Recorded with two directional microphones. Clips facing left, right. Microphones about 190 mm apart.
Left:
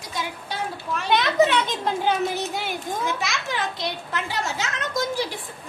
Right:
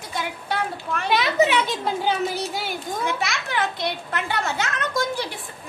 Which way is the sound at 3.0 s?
60° right (ahead or behind).